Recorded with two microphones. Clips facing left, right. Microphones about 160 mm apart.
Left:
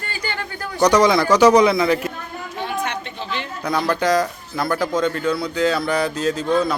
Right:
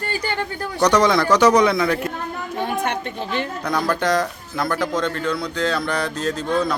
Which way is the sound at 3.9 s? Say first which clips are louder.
Left 3 dB; centre (ahead or behind).